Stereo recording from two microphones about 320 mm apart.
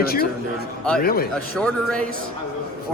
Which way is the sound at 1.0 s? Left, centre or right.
Left.